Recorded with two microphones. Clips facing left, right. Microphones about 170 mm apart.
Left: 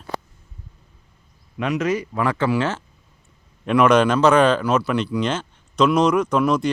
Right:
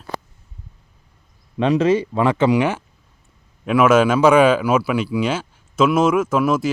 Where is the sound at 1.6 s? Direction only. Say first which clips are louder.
Right 6 dB; 30° right (ahead or behind).